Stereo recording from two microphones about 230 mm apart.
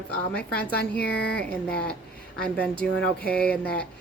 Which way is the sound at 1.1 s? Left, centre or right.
Left.